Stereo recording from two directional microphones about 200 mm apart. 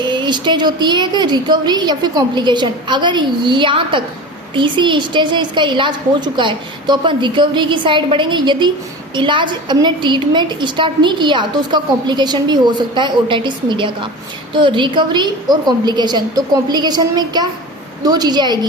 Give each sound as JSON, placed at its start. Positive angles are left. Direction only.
{"t": 0.0, "sound": "a woman's voice", "side_deg": -25}